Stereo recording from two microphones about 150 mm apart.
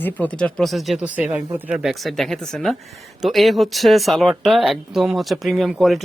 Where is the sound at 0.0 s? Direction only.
10° left (ahead or behind).